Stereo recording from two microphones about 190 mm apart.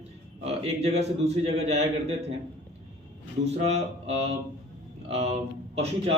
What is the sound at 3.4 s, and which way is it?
Speech, 35° right (ahead or behind).